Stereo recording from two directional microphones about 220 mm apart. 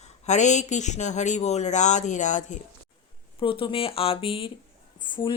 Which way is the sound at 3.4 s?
25° left (ahead or behind).